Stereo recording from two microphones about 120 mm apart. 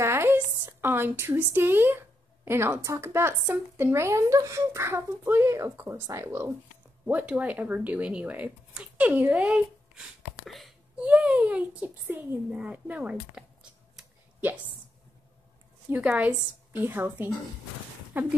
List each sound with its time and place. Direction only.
0.0 s a woman's voice: 20° right (ahead or behind)
15.9 s speech: 10° right (ahead or behind)